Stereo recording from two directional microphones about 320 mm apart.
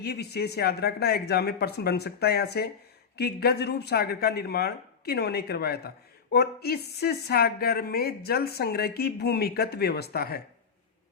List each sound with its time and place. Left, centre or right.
0.0 s speech: left